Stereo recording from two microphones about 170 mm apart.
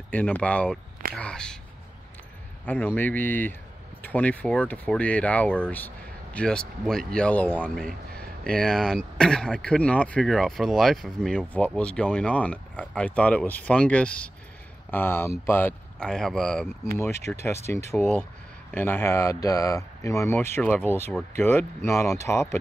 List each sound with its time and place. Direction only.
0.1 s speech: 10° left (ahead or behind)
2.6 s speech: 10° left (ahead or behind)
17.0 s speech: 15° left (ahead or behind)